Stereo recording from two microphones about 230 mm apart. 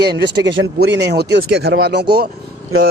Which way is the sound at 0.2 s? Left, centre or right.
Right.